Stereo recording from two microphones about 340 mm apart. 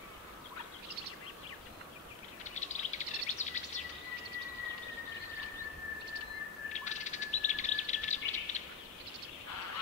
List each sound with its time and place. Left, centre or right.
2.4 s bird: left
6.7 s bird: left